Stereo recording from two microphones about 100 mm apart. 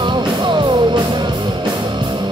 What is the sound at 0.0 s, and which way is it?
Music, 50° right (ahead or behind).